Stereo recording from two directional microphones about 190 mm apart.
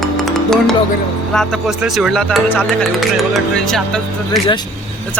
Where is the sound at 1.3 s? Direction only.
5° left (ahead or behind).